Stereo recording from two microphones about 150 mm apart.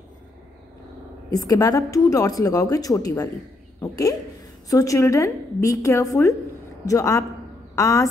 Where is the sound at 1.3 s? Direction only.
25° left (ahead or behind).